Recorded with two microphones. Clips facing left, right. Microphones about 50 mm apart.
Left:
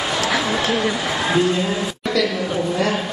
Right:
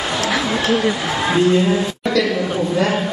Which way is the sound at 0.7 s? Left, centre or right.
Right.